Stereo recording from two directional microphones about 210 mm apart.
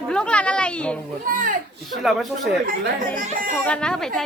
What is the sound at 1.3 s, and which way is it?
Speech, 40° right (ahead or behind).